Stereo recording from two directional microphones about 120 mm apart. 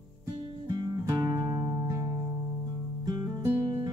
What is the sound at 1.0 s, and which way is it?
Music, 30° right (ahead or behind).